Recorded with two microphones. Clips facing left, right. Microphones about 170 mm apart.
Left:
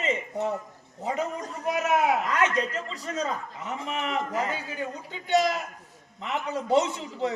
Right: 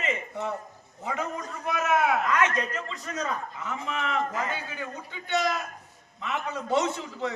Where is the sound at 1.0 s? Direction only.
35° left (ahead or behind).